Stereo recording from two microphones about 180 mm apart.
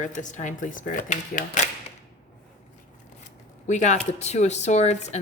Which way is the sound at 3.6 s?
40° left (ahead or behind).